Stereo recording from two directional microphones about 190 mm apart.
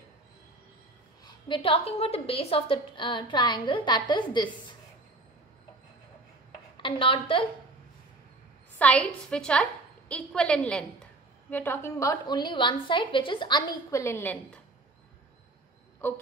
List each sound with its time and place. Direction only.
1.2 s a woman's voice: 25° left (ahead or behind)
6.8 s a woman's voice: 25° left (ahead or behind)
8.7 s a woman's voice: 5° left (ahead or behind)
16.0 s speech: 10° left (ahead or behind)